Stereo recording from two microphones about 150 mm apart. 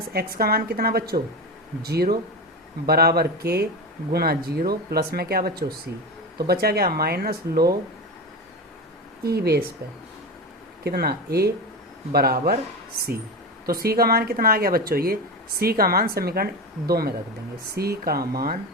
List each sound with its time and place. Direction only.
0.1 s speech: 90° right
9.2 s speech: 90° right
10.8 s speech: 90° right
13.7 s speech: 85° right